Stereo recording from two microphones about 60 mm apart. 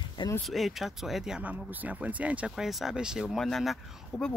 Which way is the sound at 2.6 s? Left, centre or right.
Centre.